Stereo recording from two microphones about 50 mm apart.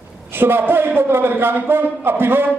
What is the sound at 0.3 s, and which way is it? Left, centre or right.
A man's voice, right.